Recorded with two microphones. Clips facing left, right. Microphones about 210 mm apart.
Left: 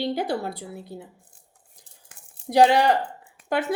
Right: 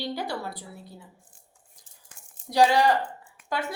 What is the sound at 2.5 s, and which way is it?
Speech, 60° left (ahead or behind).